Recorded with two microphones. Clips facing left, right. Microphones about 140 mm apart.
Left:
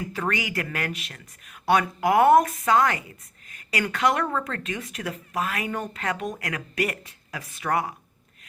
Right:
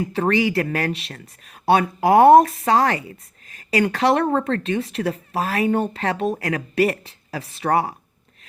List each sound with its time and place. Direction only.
0.0 s speech: 30° right (ahead or behind)